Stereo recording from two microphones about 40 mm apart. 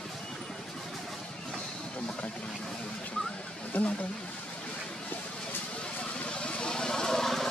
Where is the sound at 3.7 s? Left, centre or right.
Left.